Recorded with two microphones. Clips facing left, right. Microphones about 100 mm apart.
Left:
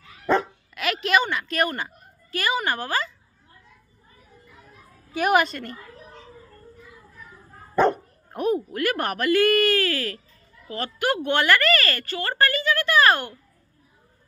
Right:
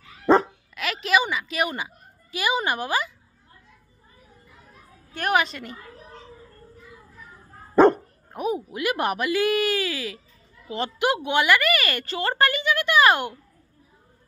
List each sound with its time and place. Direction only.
0.3 s dog: 25° right (ahead or behind)
0.7 s a sound: centre (ahead or behind)
1.3 s a woman's voice: 5° right (ahead or behind)
5.1 s a woman's voice: 5° left (ahead or behind)
7.7 s dog: 40° right (ahead or behind)
8.3 s a woman's voice: 5° right (ahead or behind)
10.7 s a woman's voice: 20° right (ahead or behind)